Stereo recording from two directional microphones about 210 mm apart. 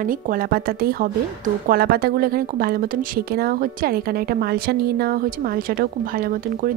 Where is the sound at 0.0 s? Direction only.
40° right (ahead or behind).